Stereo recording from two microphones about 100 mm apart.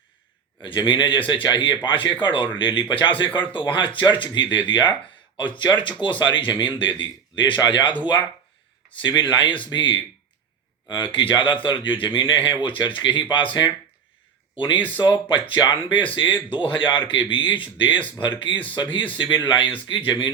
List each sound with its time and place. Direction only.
0.6 s a man's voice: 55° left (ahead or behind)
15.4 s a man's voice: 55° left (ahead or behind)
18.5 s speech: 15° left (ahead or behind)
18.8 s a man's voice: 55° left (ahead or behind)